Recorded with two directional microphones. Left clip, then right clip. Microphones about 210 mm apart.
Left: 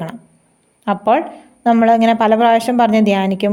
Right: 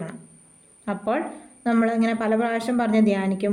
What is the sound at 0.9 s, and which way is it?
A woman's voice, 35° left (ahead or behind).